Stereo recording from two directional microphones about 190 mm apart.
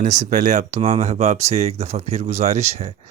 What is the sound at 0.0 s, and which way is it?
Speech, 40° right (ahead or behind).